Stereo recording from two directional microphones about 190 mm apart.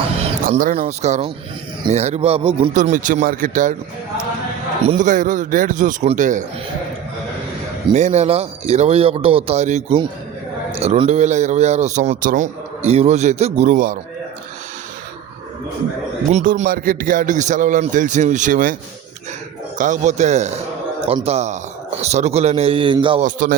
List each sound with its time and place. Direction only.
0.4 s a man's voice: 40° right (ahead or behind)
2.7 s a man's voice: 40° right (ahead or behind)
4.8 s a man's voice: 35° right (ahead or behind)
7.9 s a man's voice: 35° right (ahead or behind)
16.3 s a man's voice: 40° right (ahead or behind)
19.8 s a man's voice: 40° right (ahead or behind)
23.2 s a man's voice: 45° right (ahead or behind)